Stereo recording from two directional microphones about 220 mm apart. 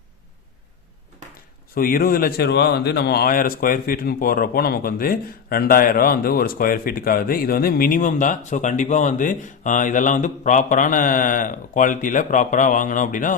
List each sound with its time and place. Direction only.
1.7 s a man's voice: 40° left (ahead or behind)